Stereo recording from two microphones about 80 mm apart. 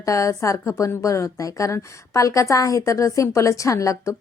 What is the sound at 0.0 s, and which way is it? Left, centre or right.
A woman's voice, left.